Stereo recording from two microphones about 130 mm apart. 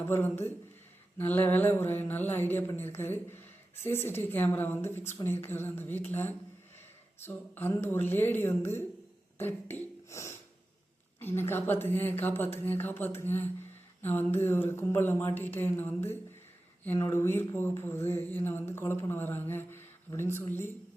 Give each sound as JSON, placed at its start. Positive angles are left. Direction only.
{"t": 0.0, "sound": "speech", "side_deg": 15}